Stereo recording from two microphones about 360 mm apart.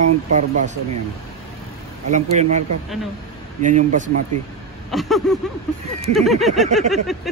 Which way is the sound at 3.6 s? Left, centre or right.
Right.